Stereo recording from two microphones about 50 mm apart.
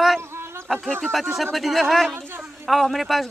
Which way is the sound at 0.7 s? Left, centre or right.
Centre.